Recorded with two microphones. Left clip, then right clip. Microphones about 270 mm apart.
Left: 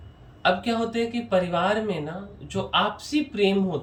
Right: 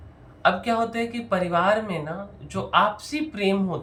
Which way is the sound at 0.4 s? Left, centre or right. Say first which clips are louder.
Right 2 dB; centre.